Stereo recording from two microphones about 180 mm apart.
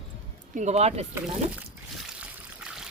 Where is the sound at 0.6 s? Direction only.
40° right (ahead or behind).